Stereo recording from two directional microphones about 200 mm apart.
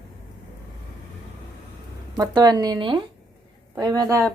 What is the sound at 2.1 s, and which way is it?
A woman's voice, 20° right (ahead or behind).